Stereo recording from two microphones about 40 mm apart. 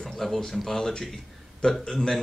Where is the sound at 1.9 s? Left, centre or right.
Centre.